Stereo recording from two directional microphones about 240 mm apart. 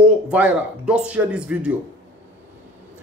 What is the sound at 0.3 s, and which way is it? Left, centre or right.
Speech, centre.